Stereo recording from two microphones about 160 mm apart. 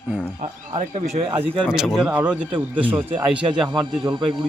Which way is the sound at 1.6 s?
Centre (ahead or behind).